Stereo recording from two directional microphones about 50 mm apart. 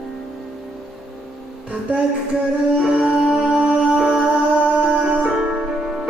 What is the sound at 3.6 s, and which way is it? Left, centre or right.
Music, right.